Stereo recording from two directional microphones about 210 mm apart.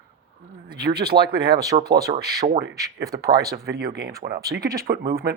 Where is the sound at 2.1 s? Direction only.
55° right (ahead or behind).